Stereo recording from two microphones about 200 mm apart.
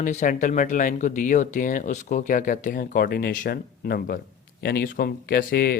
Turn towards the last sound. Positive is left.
turn(degrees=50)  # may be behind; listen again after turning